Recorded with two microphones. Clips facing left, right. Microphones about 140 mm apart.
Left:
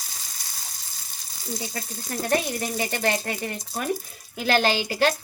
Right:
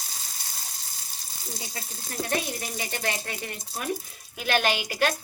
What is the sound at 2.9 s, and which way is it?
Speech, 50° left (ahead or behind).